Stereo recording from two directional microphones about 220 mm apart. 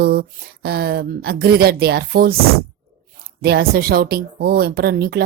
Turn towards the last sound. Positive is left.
turn(degrees=-45)  # may be behind; listen again after turning